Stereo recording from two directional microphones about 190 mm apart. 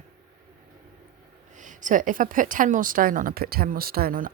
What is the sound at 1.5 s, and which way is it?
A woman's voice, 40° right (ahead or behind).